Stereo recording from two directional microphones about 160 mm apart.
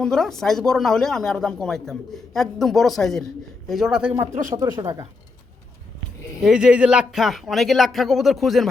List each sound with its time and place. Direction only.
0.0 s speech: 5° left (ahead or behind)
4.4 s speech: 25° right (ahead or behind)
6.4 s speech: 5° right (ahead or behind)